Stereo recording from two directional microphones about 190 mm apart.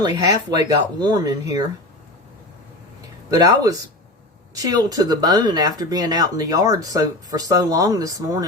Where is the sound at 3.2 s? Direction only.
20° right (ahead or behind).